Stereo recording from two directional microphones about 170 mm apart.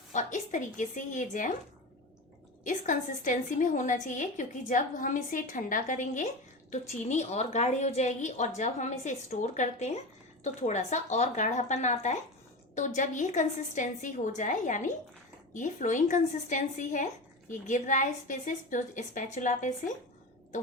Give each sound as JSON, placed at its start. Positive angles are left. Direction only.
{"t": 0.1, "sound": "a woman's voice", "side_deg": 45}
{"t": 2.6, "sound": "a woman's voice", "side_deg": 45}